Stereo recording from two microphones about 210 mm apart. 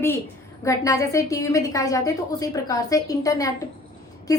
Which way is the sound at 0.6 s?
15° left (ahead or behind).